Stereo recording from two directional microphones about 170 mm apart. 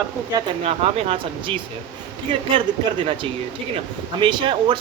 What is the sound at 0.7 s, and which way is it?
Speech, 35° right (ahead or behind).